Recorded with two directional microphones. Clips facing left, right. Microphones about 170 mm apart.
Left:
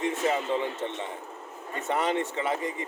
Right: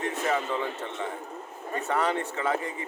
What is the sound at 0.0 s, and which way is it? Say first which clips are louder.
A man's voice: left 1 dB; 20° left (ahead or behind).